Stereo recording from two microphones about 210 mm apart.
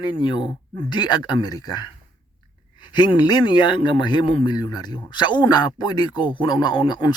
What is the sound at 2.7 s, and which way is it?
Speech, 20° left (ahead or behind).